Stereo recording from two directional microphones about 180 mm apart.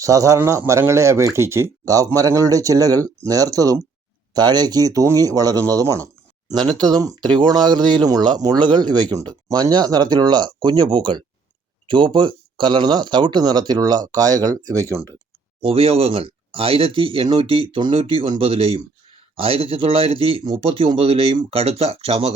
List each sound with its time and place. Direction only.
0.0 s speech: 20° right (ahead or behind)
15.6 s speech: 35° right (ahead or behind)